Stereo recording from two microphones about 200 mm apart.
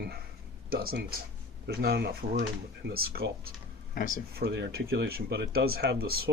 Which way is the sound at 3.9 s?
45° left (ahead or behind).